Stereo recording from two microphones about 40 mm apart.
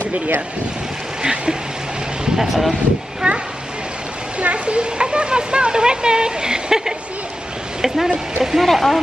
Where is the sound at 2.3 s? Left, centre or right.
Centre.